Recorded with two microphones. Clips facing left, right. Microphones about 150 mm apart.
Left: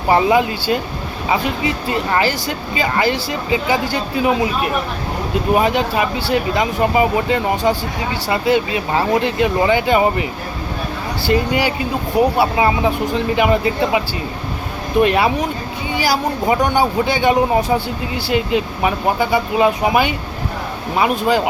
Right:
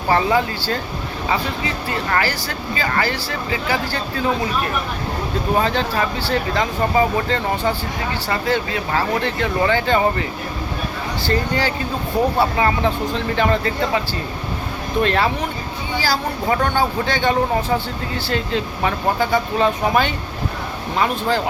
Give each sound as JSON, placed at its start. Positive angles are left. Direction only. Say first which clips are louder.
{"t": 0.1, "sound": "speech", "louder": "left 4 dB", "side_deg": 15}
{"t": 11.3, "sound": "speech", "louder": "left 4 dB", "side_deg": 15}
{"t": 15.0, "sound": "speech", "louder": "left 3 dB", "side_deg": 15}